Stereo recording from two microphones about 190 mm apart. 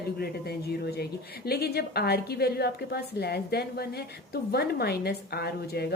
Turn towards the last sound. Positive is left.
turn(degrees=55)  # may be behind; listen again after turning